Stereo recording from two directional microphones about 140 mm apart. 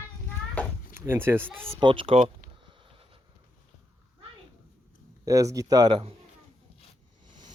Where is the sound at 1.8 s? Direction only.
35° right (ahead or behind).